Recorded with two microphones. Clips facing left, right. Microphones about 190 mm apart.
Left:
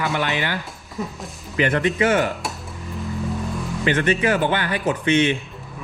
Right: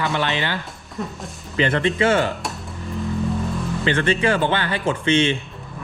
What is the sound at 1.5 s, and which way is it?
Speech, 25° right (ahead or behind).